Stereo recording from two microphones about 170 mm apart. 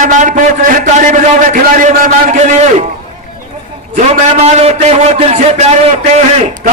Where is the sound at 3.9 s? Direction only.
40° right (ahead or behind).